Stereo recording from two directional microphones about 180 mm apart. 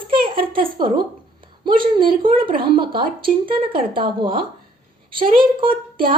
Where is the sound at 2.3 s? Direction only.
30° right (ahead or behind).